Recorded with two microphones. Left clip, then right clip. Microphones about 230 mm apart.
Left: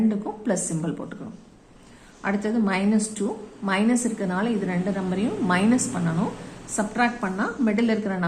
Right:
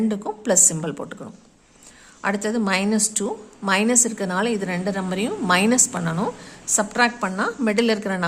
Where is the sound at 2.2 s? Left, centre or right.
Right.